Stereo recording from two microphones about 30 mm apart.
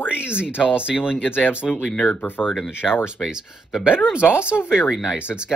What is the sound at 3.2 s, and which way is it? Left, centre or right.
Speech, left.